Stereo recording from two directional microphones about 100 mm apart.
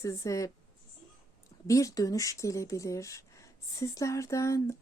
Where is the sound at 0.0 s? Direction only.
35° left (ahead or behind).